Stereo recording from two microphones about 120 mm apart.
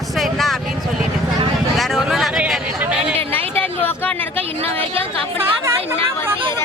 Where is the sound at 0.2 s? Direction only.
Centre (ahead or behind).